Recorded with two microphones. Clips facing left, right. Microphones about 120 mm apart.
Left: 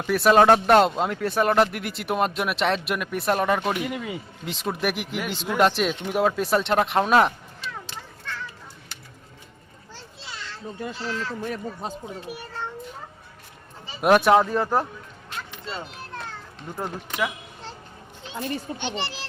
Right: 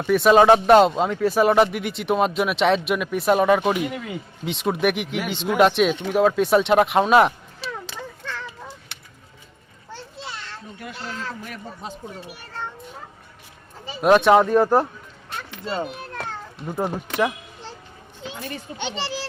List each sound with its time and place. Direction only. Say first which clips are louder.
0.1 s speech: right 2 dB; centre (ahead or behind)
11.4 s a man's voice: left 5 dB; 35° left (ahead or behind)
14.0 s speech: right 2 dB; 5° left (ahead or behind)
15.6 s a child's voice: right 10 dB; 55° right (ahead or behind)
16.7 s speech: right 6 dB; 15° right (ahead or behind)
18.8 s speech: right 2 dB; 90° right